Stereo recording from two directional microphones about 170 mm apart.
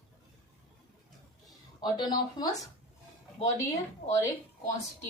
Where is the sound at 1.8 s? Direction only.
25° left (ahead or behind).